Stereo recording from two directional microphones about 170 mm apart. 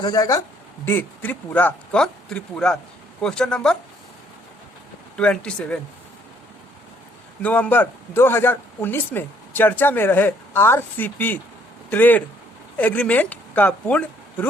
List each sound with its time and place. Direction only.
0.0 s a man's voice: 20° left (ahead or behind); by 3.8 s 5° left (ahead or behind)
5.1 s speech: 5° left (ahead or behind)
7.4 s a man's voice: 10° left (ahead or behind)